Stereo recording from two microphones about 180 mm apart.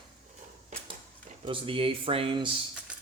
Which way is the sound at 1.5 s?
30° right (ahead or behind).